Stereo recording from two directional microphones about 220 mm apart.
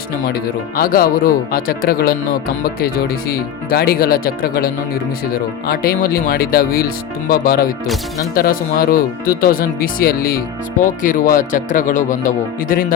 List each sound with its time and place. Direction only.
0.3 s speech: 40° left (ahead or behind)